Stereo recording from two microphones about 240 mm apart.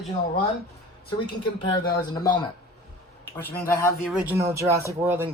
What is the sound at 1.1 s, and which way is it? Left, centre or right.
Speech, centre.